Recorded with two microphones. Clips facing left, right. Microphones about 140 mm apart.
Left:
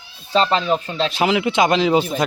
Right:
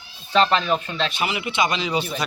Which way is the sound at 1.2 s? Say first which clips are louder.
Left 8 dB; 90° left.